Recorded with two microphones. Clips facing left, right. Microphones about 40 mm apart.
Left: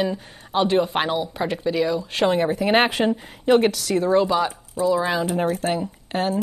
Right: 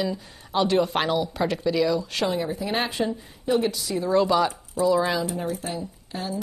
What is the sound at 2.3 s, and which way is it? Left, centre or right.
A woman's voice, left.